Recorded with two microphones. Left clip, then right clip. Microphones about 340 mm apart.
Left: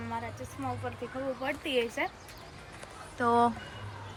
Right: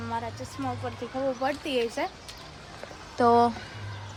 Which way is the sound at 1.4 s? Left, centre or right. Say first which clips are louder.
Even; centre.